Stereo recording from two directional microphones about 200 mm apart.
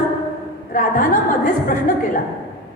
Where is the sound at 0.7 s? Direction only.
45° left (ahead or behind).